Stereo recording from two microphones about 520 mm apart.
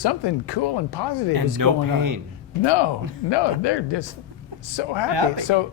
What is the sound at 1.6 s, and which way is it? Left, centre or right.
Speech, right.